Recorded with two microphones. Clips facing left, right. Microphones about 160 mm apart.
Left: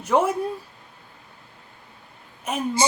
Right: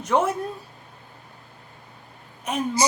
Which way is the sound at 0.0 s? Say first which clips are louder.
Left 1 dB; 10° left (ahead or behind).